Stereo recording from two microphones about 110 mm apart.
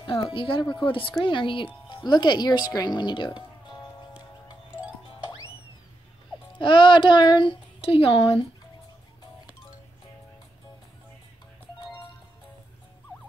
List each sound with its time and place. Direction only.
0.0 s speech: 50° left (ahead or behind)
6.6 s speech: 50° left (ahead or behind)